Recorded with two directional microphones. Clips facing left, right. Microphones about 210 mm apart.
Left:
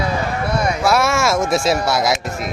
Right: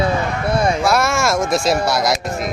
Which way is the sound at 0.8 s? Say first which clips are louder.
Even; centre (ahead or behind).